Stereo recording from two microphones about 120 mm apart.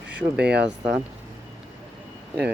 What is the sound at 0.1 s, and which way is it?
Speech, 10° right (ahead or behind).